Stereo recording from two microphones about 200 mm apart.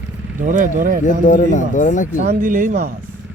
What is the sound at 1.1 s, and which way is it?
Speech, 40° left (ahead or behind).